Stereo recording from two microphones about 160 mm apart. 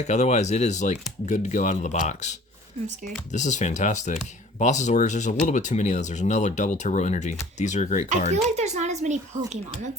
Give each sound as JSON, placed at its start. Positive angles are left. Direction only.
{"t": 0.0, "sound": "speech", "side_deg": 45}
{"t": 3.3, "sound": "speech", "side_deg": 50}
{"t": 8.3, "sound": "speech", "side_deg": -45}